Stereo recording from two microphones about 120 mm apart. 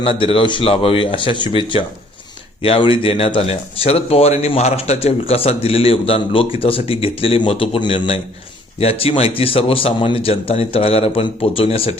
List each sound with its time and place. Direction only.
0.0 s speech: 50° left (ahead or behind)